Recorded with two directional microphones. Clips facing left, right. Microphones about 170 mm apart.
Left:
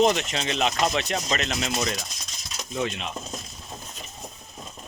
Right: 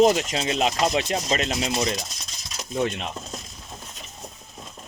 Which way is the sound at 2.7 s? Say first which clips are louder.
Right 3 dB; 45° right (ahead or behind).